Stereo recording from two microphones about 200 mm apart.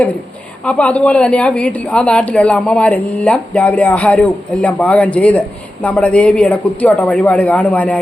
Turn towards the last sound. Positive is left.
turn(degrees=5)  # may be behind; listen again after turning